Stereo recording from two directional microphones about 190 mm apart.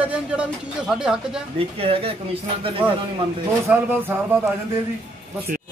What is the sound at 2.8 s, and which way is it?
Speech, 10° right (ahead or behind).